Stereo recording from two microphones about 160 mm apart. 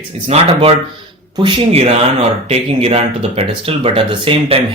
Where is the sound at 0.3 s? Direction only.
40° right (ahead or behind).